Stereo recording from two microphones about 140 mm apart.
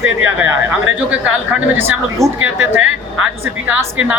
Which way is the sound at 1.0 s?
10° right (ahead or behind).